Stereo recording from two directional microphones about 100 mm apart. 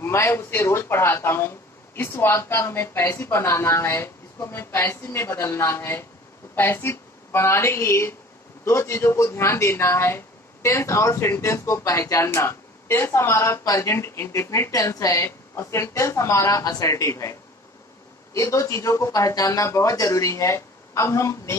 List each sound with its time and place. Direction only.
0.0 s a woman's voice: 25° left (ahead or behind)